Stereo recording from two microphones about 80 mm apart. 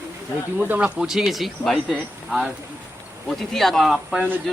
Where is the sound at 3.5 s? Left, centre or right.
Centre.